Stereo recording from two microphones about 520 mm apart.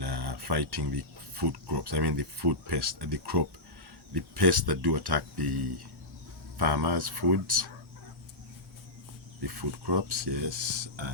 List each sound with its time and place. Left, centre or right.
0.0 s speech: right
9.4 s speech: right
10.1 s speech: right